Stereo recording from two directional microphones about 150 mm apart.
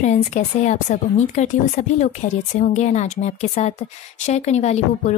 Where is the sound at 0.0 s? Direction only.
55° left (ahead or behind).